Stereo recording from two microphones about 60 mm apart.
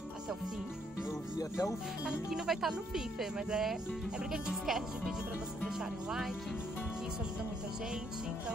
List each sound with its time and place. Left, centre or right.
1.4 s speech: left
2.0 s speech: centre